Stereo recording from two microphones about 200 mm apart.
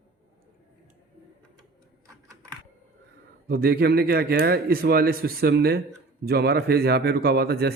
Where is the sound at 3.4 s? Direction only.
50° right (ahead or behind).